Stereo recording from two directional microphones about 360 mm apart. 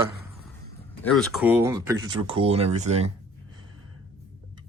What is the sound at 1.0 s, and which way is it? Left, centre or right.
Speech, centre.